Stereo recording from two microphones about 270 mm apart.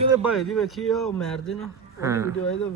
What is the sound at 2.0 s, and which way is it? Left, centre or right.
Speech, centre.